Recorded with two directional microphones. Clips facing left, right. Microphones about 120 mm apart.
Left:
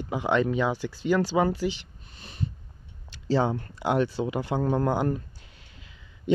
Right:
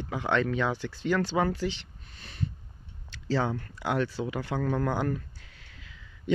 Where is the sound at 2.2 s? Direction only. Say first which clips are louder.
Left 1 dB; 15° left (ahead or behind).